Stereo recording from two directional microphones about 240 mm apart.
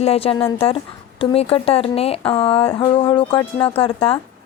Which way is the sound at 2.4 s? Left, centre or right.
Left.